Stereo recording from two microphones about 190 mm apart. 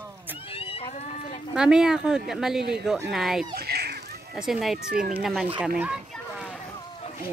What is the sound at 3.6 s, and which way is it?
Children playing, 55° right (ahead or behind).